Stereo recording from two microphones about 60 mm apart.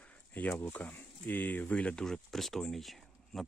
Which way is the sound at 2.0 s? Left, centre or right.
Centre.